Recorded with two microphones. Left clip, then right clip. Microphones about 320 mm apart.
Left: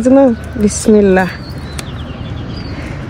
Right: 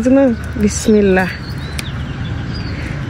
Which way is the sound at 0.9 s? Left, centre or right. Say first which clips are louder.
Left 3 dB; left.